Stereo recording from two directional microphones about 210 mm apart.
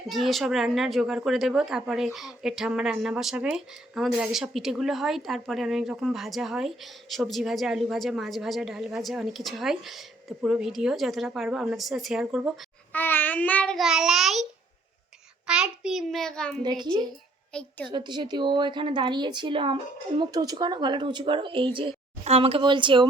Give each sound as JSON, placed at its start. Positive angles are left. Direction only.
{"t": 0.1, "sound": "speech", "side_deg": 0}
{"t": 12.9, "sound": "a child's voice", "side_deg": 10}
{"t": 15.4, "sound": "speech", "side_deg": -5}
{"t": 16.6, "sound": "a woman's voice", "side_deg": -20}
{"t": 17.5, "sound": "a woman's voice", "side_deg": 5}
{"t": 17.8, "sound": "a woman's voice", "side_deg": -20}